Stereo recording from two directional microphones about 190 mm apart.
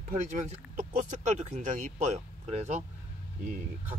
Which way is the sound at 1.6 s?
40° right (ahead or behind).